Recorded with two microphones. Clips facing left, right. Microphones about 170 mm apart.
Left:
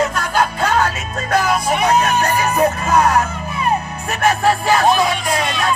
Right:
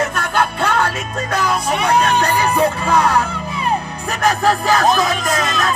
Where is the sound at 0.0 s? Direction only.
55° right (ahead or behind).